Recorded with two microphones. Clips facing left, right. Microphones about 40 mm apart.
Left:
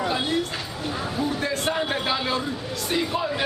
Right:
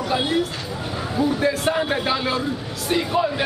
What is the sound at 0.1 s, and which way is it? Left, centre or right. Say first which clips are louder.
Speech: right 3 dB; centre.